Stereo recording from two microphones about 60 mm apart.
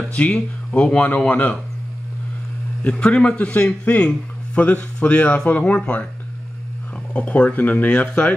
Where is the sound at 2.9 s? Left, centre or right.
Centre.